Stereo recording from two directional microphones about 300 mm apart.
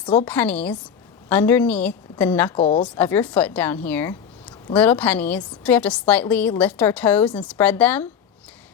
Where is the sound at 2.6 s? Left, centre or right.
Centre.